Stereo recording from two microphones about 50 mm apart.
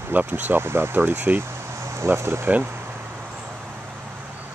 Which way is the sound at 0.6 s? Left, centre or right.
Right.